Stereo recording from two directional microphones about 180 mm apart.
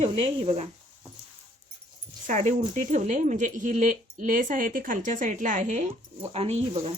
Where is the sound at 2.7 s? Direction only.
45° right (ahead or behind).